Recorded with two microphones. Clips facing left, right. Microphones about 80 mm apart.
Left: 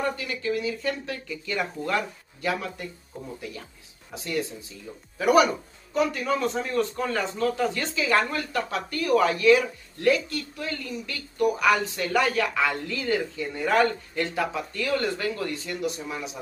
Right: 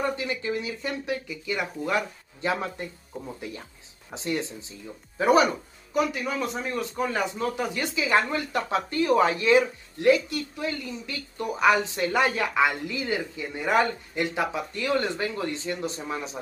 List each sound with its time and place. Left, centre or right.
0.2 s speech: right
2.4 s a man's voice: right
5.9 s a man's voice: centre; by 16.3 s right